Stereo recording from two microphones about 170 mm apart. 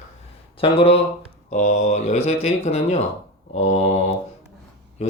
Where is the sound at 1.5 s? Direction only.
45° left (ahead or behind).